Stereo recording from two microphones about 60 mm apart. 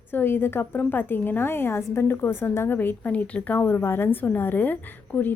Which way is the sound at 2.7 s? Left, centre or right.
Left.